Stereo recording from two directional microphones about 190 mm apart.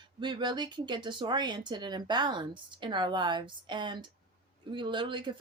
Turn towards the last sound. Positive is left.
turn(degrees=-25)  # may be behind; listen again after turning